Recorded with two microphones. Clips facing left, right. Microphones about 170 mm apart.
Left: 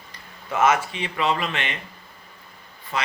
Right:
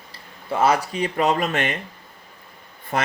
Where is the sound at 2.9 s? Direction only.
50° right (ahead or behind).